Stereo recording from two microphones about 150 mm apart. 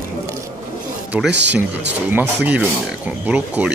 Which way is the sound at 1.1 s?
10° right (ahead or behind).